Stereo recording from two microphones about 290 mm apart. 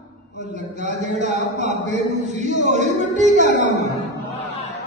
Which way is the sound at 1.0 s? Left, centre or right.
Right.